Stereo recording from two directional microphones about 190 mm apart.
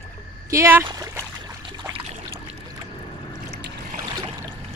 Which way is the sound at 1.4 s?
20° right (ahead or behind).